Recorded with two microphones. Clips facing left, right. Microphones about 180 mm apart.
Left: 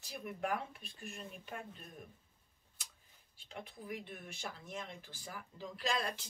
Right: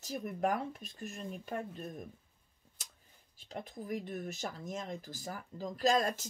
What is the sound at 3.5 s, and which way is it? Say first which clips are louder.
Speech: right 6 dB; 40° right (ahead or behind).